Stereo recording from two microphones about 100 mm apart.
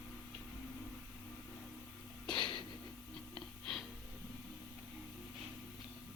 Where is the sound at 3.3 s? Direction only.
5° left (ahead or behind).